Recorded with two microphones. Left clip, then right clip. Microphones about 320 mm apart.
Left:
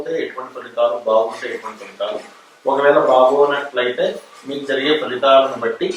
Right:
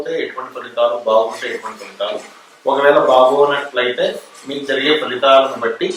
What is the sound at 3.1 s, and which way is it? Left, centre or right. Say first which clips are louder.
Speech: right 1 dB; left.